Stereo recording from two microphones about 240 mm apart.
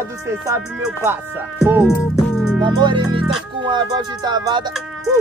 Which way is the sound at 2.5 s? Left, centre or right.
Centre.